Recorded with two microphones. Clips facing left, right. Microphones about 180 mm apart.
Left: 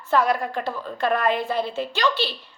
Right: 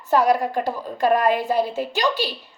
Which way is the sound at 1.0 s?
40° right (ahead or behind).